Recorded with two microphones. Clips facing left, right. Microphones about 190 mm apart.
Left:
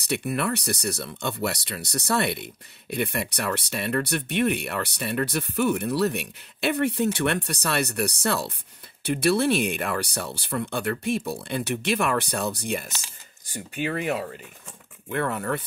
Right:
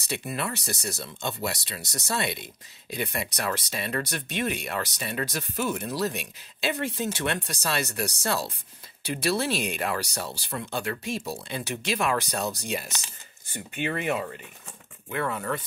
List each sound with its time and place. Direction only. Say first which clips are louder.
0.0 s speech: left 5 dB; 60° left (ahead or behind)
13.5 s speech: left 2 dB; 40° left (ahead or behind)
15.0 s speech: left 3 dB; 55° left (ahead or behind)